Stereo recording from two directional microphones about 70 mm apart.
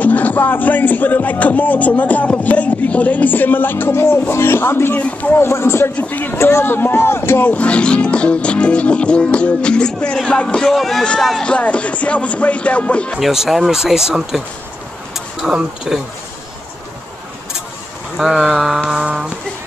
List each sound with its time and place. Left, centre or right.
0.0 s speech: left
5.0 s speech: left
5.4 s speech: left
5.9 s speech: left
6.3 s speech: left
7.5 s speech: centre
11.4 s speech: centre
13.2 s speech: centre
18.1 s speech: centre